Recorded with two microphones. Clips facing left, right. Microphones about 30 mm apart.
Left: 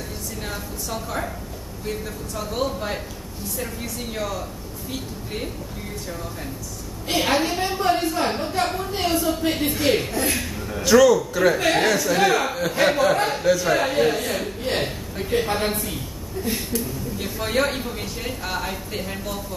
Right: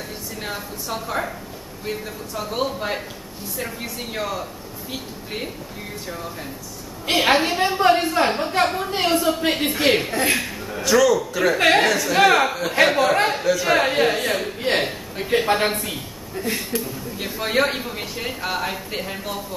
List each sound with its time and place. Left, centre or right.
0.4 s speech: centre
7.1 s a woman's voice: right
10.7 s speech: centre
11.5 s speech: right
11.8 s speech: centre
12.2 s speech: right
12.4 s speech: centre
14.6 s a sound: right
14.9 s a sound: right
16.5 s speech: centre